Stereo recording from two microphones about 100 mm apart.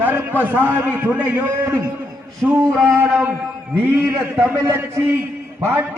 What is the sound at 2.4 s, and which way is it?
Speech, 5° right (ahead or behind).